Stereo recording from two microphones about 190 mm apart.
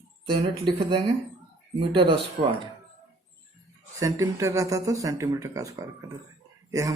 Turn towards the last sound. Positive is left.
turn(degrees=-15)  # may be behind; listen again after turning